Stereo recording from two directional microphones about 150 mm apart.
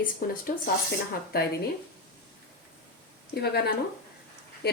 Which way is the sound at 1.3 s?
90° left.